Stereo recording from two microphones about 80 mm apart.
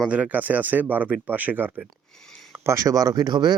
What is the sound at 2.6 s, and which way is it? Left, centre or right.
Speech, right.